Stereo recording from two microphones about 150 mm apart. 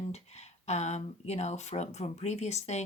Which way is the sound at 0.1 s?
45° left (ahead or behind).